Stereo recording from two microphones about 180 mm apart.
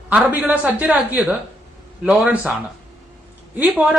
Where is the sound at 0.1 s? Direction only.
10° right (ahead or behind).